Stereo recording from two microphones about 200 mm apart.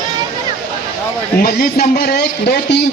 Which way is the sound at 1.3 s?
50° left (ahead or behind).